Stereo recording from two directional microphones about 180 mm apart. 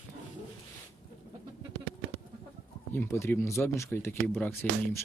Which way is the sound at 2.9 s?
10° left (ahead or behind).